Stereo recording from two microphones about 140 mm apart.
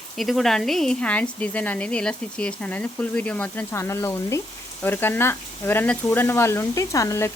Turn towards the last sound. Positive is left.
turn(degrees=20)  # may be behind; listen again after turning